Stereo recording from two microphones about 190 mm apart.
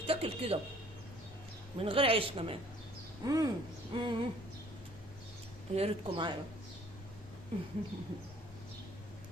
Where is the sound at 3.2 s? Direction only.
20° right (ahead or behind).